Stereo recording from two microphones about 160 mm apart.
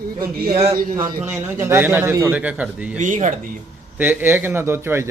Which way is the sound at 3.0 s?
50° right (ahead or behind).